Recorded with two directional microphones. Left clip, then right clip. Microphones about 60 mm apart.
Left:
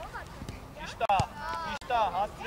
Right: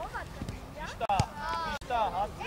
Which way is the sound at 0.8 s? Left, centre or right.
Left.